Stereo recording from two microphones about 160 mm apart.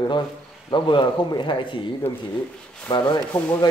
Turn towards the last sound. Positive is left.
turn(degrees=10)  # may be behind; listen again after turning